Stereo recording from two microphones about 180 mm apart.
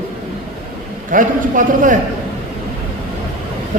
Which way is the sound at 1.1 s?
50° right (ahead or behind).